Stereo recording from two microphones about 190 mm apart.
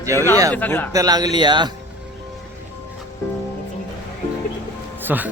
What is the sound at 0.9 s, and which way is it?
Speech, 20° right (ahead or behind).